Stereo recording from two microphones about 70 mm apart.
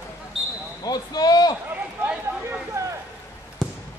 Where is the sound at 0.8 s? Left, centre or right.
Left.